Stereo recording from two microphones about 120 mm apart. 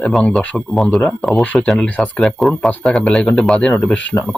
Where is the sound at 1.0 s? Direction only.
15° left (ahead or behind).